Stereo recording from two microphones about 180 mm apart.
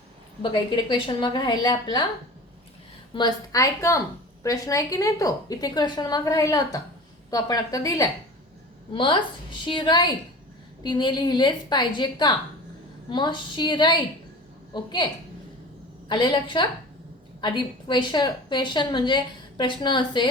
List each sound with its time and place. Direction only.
0.5 s a woman's voice: 25° left (ahead or behind)
3.2 s a woman's voice: 20° left (ahead or behind)